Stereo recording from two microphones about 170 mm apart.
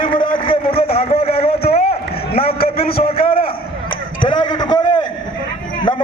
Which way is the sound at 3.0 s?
35° left (ahead or behind).